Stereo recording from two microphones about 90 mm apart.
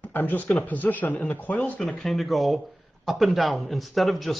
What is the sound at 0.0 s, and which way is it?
Speech, 20° left (ahead or behind).